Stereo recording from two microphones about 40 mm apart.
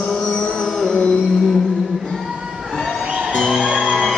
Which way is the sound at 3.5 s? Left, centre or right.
Centre.